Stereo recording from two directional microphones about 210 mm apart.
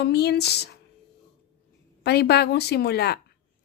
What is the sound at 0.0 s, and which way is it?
Speech, 50° left (ahead or behind).